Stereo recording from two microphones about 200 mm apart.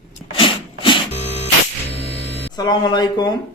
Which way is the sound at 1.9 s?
30° left (ahead or behind).